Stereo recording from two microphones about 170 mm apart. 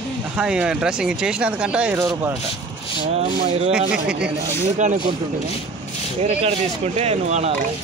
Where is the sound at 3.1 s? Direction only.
40° right (ahead or behind).